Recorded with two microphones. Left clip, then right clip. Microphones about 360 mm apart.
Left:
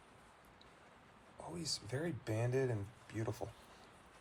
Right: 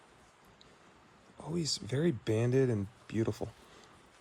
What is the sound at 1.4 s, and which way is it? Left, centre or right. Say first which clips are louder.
Speech: right 7 dB; right.